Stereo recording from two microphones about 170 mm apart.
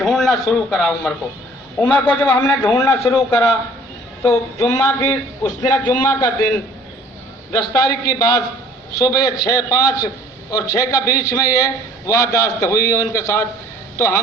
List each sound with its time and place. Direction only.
0.0 s a man's voice: centre (ahead or behind); by 6.3 s 20° left (ahead or behind)
7.5 s a man's voice: 20° left (ahead or behind)